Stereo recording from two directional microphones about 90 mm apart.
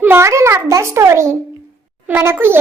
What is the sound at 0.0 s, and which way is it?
A child's voice, 25° right (ahead or behind).